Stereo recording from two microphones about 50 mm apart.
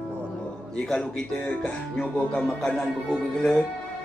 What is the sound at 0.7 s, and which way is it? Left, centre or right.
Speech, centre.